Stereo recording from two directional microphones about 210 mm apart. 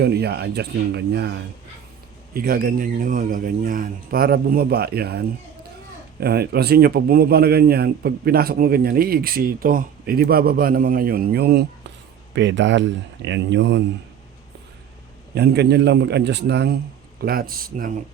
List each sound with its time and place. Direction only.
0.0 s a man's voice: 50° right (ahead or behind)
2.3 s a man's voice: 45° right (ahead or behind)
12.3 s speech: 60° right (ahead or behind)
15.4 s a man's voice: 50° right (ahead or behind)